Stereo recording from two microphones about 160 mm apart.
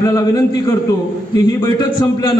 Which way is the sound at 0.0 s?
20° left (ahead or behind).